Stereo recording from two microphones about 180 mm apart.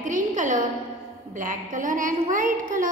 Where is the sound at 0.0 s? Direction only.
45° right (ahead or behind).